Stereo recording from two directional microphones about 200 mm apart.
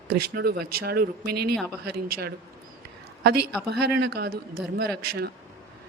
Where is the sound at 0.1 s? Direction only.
50° right (ahead or behind).